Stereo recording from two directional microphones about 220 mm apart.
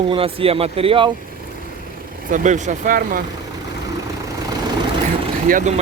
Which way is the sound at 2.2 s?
35° right (ahead or behind).